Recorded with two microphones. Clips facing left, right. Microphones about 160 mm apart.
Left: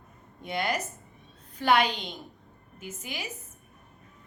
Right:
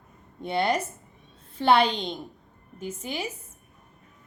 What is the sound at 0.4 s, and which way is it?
A woman's voice, 30° right (ahead or behind).